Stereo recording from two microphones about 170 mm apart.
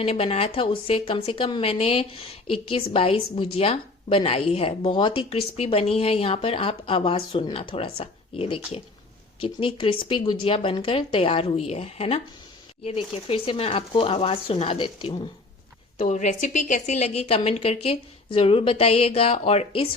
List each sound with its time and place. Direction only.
0.0 s a woman's voice: 35° left (ahead or behind)
16.0 s a woman's voice: 45° left (ahead or behind)